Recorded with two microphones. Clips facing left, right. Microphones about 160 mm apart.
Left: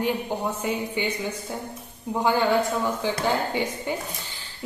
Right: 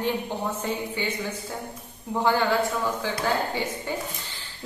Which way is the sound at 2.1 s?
15° left (ahead or behind).